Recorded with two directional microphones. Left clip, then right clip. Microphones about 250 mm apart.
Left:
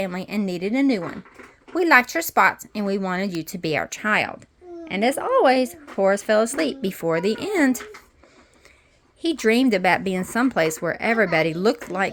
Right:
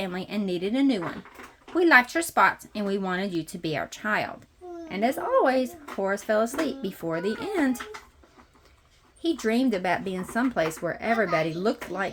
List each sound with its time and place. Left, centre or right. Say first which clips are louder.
0.0 s speech: left 4 dB; left
9.2 s speech: left 6 dB; left